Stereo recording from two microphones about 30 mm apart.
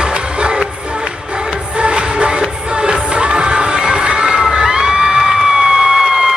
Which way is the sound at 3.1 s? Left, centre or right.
Right.